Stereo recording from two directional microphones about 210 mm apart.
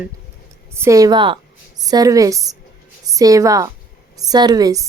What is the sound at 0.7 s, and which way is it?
A woman's voice, 15° right (ahead or behind).